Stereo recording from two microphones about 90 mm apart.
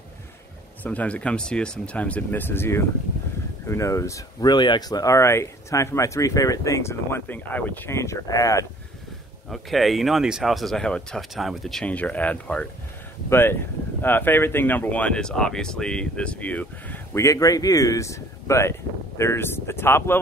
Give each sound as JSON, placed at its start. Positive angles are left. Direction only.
{"t": 0.8, "sound": "speech", "side_deg": 15}
{"t": 4.5, "sound": "speech", "side_deg": 55}
{"t": 7.9, "sound": "speech", "side_deg": 30}
{"t": 9.5, "sound": "speech", "side_deg": 0}
{"t": 11.8, "sound": "speech", "side_deg": 15}
{"t": 13.3, "sound": "speech", "side_deg": 25}
{"t": 17.2, "sound": "speech", "side_deg": 40}